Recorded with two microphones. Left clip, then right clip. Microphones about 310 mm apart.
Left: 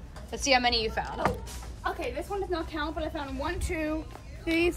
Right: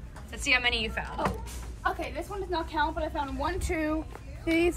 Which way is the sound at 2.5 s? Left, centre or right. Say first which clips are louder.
Right 3 dB; centre.